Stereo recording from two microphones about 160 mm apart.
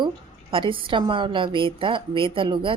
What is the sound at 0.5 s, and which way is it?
A woman's voice, 35° right (ahead or behind).